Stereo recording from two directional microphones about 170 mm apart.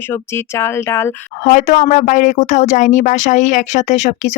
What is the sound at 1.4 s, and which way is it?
A woman's voice, 50° left (ahead or behind).